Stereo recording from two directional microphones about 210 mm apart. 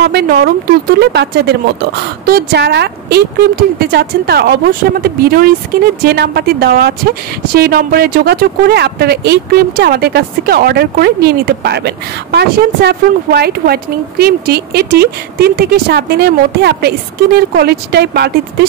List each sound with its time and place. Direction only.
0.0 s a woman's voice: 50° right (ahead or behind)